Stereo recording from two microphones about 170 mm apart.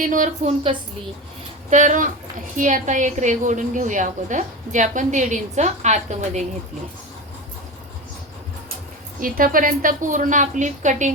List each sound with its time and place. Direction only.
0.0 s a woman's voice: 50° right (ahead or behind)
1.7 s a woman's voice: 45° right (ahead or behind)
9.2 s a woman's voice: 55° right (ahead or behind)